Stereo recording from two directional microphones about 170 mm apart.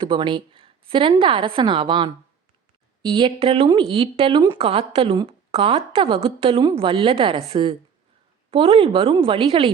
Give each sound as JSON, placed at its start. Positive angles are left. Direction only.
{"t": 0.0, "sound": "a woman's voice", "side_deg": -30}